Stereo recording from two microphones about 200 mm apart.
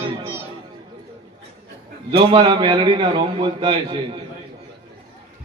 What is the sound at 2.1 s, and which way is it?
A man's voice, 30° right (ahead or behind).